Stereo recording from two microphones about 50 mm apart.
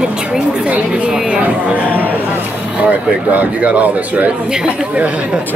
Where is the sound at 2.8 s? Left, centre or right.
Right.